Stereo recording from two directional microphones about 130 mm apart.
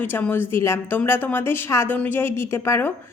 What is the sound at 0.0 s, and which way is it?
A woman's voice, 15° left (ahead or behind).